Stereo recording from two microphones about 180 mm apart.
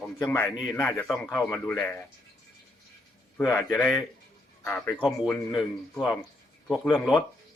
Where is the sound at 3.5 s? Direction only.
15° left (ahead or behind).